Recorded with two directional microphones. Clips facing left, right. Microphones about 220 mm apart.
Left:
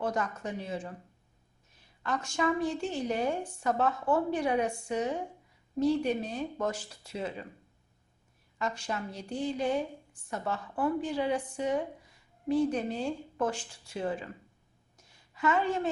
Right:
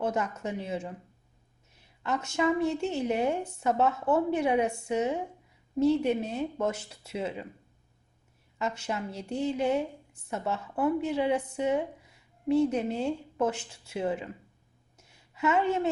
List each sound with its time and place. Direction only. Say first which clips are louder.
0.0 s speech: right 2 dB; 25° right (ahead or behind)
2.0 s speech: right 3 dB; 20° right (ahead or behind)
8.5 s speech: right 2 dB; 25° right (ahead or behind)
14.9 s a sound: right 3 dB; 25° right (ahead or behind)